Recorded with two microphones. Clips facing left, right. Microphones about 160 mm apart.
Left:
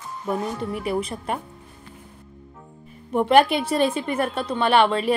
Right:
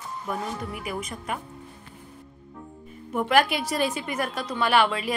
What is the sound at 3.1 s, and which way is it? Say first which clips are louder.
A woman's voice: left 5 dB; 30° left (ahead or behind).